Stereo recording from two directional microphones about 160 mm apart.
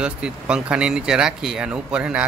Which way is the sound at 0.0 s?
5° right (ahead or behind).